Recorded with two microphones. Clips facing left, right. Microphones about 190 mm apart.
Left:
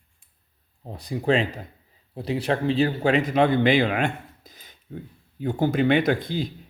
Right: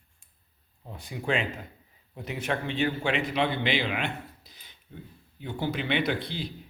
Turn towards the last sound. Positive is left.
turn(degrees=45)  # may be behind; listen again after turning